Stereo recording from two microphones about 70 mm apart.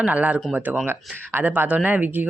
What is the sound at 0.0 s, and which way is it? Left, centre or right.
Speech, right.